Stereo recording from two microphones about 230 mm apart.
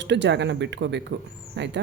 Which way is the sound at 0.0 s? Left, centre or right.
Right.